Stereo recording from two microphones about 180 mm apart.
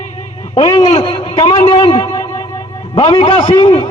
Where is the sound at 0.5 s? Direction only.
20° left (ahead or behind).